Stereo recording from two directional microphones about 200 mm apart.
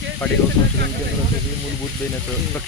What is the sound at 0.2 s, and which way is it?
Speech, 5° left (ahead or behind).